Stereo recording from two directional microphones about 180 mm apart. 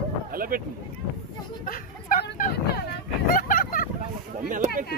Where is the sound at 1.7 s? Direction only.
50° left (ahead or behind).